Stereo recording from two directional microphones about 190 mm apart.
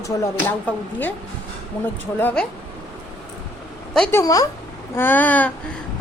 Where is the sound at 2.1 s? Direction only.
5° left (ahead or behind).